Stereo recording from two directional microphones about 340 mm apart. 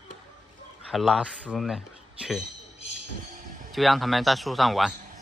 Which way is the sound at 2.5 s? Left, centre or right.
Right.